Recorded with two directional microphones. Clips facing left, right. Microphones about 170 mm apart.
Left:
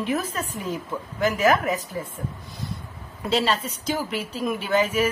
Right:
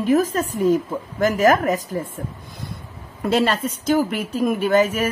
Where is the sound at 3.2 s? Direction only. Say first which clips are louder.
Right 4 dB; 50° right (ahead or behind).